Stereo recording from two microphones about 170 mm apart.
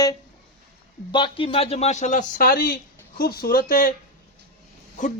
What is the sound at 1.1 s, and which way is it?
A man's voice, 30° left (ahead or behind).